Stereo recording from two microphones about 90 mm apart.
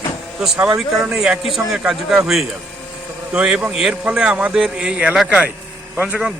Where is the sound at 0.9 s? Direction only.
5° right (ahead or behind).